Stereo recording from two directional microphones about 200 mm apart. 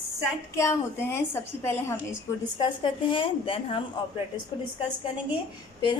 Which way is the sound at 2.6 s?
25° left (ahead or behind).